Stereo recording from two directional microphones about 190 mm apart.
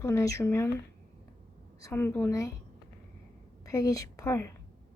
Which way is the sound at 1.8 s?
10° left (ahead or behind).